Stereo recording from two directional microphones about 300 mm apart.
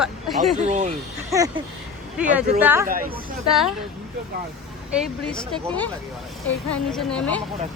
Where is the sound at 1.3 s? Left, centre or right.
Centre.